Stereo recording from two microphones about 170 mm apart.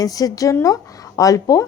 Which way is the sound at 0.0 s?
20° left (ahead or behind).